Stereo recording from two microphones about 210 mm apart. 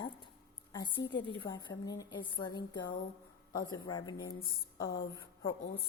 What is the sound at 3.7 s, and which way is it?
Speech, 20° left (ahead or behind).